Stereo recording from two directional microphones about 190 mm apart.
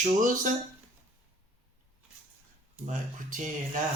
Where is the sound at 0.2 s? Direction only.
45° right (ahead or behind).